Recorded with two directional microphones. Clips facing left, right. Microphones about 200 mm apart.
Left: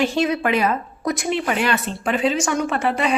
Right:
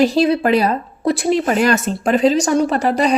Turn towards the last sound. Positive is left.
turn(degrees=-40)  # may be behind; listen again after turning